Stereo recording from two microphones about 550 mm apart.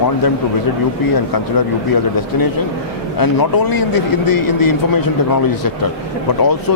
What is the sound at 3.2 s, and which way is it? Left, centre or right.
Speech, left.